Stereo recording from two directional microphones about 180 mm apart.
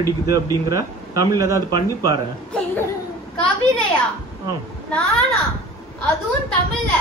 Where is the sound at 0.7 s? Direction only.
20° right (ahead or behind).